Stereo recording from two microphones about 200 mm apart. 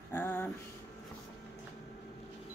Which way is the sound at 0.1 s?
10° left (ahead or behind).